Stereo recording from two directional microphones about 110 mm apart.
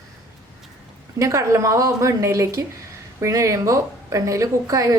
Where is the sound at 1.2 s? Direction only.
30° right (ahead or behind).